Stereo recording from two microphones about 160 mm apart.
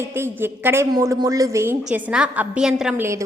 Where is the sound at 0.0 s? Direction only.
15° right (ahead or behind).